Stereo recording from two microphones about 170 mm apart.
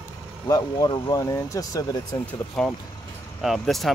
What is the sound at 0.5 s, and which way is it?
Speech, 20° left (ahead or behind).